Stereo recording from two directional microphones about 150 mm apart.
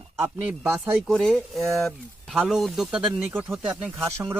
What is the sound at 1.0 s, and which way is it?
Speech, centre (ahead or behind).